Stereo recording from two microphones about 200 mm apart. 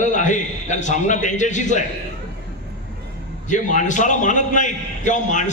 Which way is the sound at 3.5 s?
40° left (ahead or behind).